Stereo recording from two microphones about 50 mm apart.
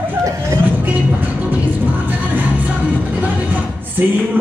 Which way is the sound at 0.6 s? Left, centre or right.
Right.